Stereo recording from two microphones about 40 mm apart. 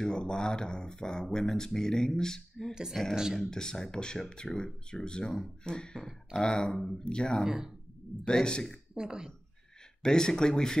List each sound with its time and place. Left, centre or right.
0.0 s speech: centre
2.7 s speech: centre
3.4 s speech: centre
7.4 s speech: centre
8.3 s speech: left
8.9 s speech: centre
10.0 s speech: centre